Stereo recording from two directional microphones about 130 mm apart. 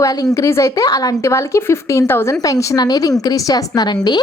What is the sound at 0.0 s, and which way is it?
A woman's voice, 30° left (ahead or behind).